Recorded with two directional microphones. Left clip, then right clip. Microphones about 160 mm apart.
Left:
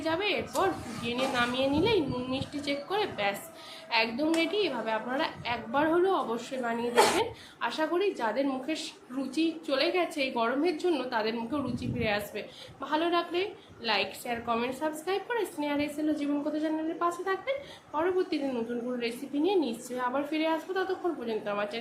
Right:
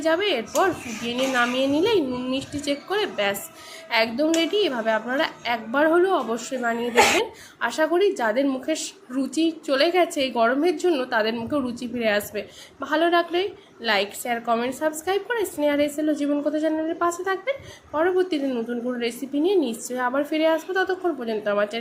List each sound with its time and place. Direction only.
0.0 s a woman's voice: 40° right (ahead or behind)